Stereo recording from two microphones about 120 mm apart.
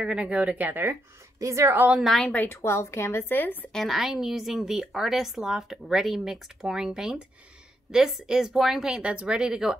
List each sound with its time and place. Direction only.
0.0 s a woman's voice: 10° right (ahead or behind)
2.0 s a woman's voice: centre (ahead or behind)
2.4 s a woman's voice: 20° left (ahead or behind)
3.7 s a woman's voice: centre (ahead or behind)